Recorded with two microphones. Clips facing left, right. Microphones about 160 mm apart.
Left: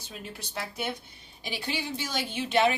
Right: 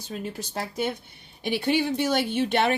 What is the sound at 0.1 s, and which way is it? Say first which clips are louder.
Speech: right 7 dB; 45° right (ahead or behind).